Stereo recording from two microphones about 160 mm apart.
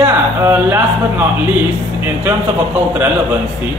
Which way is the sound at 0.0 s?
15° right (ahead or behind).